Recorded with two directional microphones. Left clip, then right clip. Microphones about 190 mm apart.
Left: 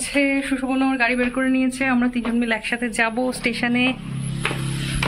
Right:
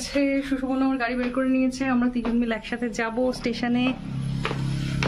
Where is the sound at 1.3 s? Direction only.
15° left (ahead or behind).